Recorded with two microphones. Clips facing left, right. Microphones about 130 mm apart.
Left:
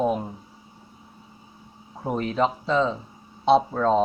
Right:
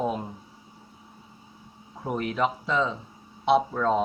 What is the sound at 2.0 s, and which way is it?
Speech, 20° left (ahead or behind).